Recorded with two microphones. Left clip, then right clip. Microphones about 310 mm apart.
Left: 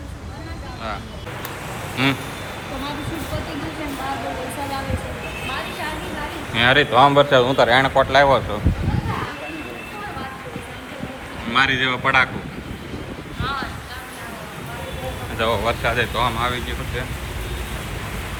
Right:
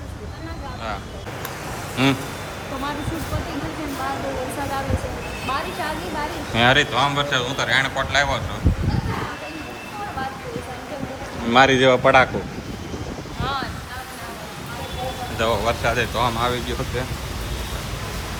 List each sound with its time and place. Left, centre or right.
2.0 s speech: centre
6.6 s a man's voice: centre
11.4 s speech: centre
15.4 s speech: centre